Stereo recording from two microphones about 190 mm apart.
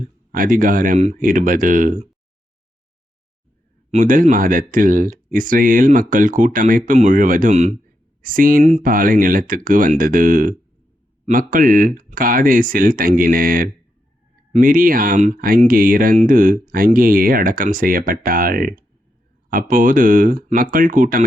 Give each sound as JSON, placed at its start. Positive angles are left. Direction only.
{"t": 0.3, "sound": "speech", "side_deg": -45}
{"t": 3.9, "sound": "speech", "side_deg": -45}